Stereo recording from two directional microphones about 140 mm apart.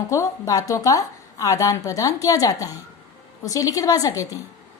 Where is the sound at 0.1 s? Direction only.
20° left (ahead or behind).